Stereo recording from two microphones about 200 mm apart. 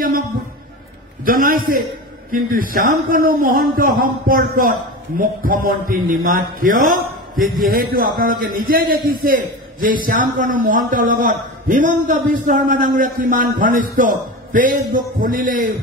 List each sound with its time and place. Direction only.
1.2 s a man's voice: 45° right (ahead or behind)